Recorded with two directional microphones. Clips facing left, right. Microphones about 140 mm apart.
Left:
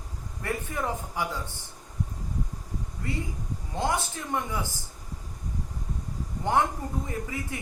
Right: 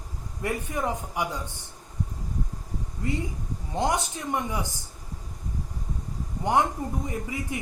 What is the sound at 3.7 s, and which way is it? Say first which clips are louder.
Speech: right 2 dB; 20° right (ahead or behind).